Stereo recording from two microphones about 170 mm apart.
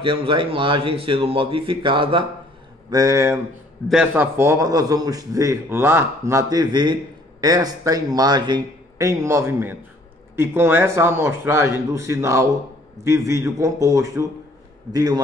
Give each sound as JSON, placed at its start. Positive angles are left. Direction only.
{"t": 0.0, "sound": "a man's voice", "side_deg": -30}
{"t": 3.9, "sound": "a man's voice", "side_deg": -5}